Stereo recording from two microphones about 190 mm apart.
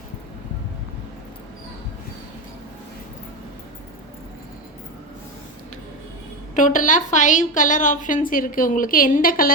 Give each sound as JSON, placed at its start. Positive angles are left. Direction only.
{"t": 6.6, "sound": "a woman's voice", "side_deg": 40}